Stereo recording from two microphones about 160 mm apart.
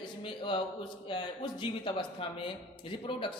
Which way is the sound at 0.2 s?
30° left (ahead or behind).